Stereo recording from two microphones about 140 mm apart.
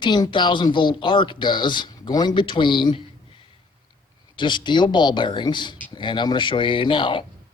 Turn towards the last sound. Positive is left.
turn(degrees=35)  # may be behind; listen again after turning